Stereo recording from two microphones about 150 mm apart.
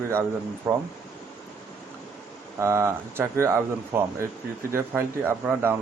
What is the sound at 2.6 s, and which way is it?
Speech, 20° right (ahead or behind).